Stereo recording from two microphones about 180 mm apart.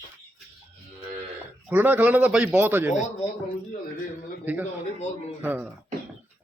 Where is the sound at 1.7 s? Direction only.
10° right (ahead or behind).